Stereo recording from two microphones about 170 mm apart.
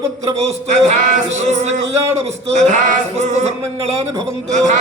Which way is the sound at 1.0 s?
45° right (ahead or behind).